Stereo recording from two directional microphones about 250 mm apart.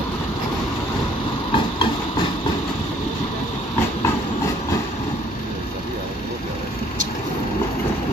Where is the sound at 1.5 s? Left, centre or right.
Centre.